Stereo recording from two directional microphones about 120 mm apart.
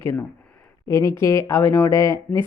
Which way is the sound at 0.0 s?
20° left (ahead or behind).